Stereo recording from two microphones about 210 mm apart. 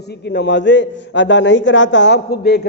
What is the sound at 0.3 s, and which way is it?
A man's voice, 55° left (ahead or behind).